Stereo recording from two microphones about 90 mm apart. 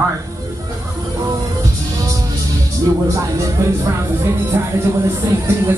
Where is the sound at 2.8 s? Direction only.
35° right (ahead or behind).